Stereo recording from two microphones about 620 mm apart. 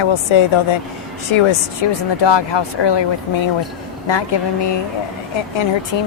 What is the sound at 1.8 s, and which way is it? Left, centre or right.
A woman's voice, left.